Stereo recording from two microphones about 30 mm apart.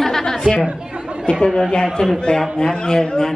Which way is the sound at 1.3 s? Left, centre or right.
Left.